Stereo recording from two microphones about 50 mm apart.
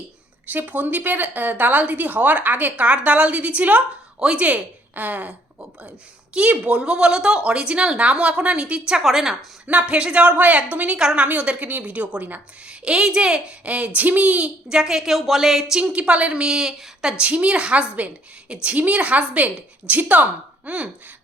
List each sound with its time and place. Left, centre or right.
0.4 s a woman's voice: right
8.9 s a woman's voice: centre
9.6 s a woman's voice: right
12.6 s a woman's voice: centre
14.7 s a woman's voice: centre
15.7 s a woman's voice: right